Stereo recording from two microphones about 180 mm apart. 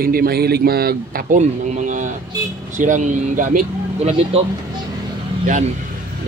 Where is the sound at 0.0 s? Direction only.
55° right (ahead or behind).